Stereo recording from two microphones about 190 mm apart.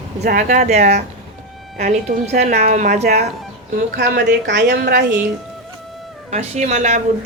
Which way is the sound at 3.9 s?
60° right (ahead or behind).